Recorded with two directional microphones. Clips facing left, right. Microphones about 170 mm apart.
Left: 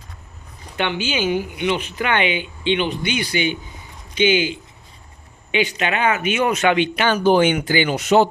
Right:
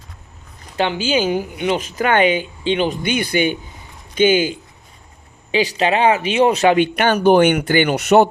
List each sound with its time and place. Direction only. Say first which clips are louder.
0.8 s speech: right 4 dB; 35° right (ahead or behind)
5.5 s speech: right 4 dB; 35° right (ahead or behind)
6.8 s speech: right 3 dB; 50° right (ahead or behind)